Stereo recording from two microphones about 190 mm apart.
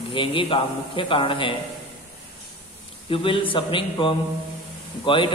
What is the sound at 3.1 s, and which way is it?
A man's voice, 30° left (ahead or behind).